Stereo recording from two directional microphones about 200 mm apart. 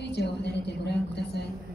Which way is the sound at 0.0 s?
60° left (ahead or behind).